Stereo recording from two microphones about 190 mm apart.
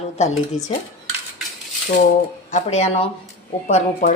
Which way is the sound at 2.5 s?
35° left (ahead or behind).